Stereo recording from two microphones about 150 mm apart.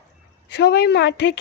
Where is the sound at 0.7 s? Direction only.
90° left.